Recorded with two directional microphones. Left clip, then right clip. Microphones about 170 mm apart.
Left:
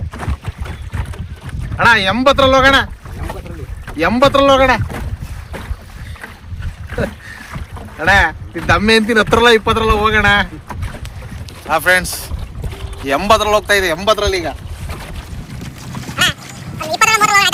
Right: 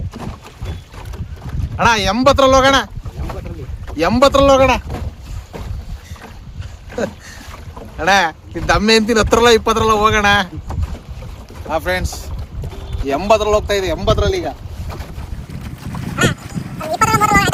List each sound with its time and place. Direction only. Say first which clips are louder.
1.8 s speech: left 2 dB; 10° right (ahead or behind)
3.9 s speech: even; 15° right (ahead or behind)
7.9 s speech: left 2 dB; 15° right (ahead or behind)
11.7 s speech: left 6 dB; 10° left (ahead or behind)
16.1 s dog: left 3 dB; centre (ahead or behind)
16.9 s a sound: left 2 dB; centre (ahead or behind)